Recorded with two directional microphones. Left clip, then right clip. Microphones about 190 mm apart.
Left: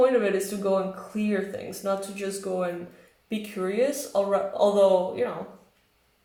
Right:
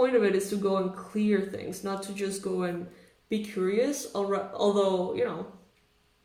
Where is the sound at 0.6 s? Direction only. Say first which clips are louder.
Left 3 dB; 45° right (ahead or behind).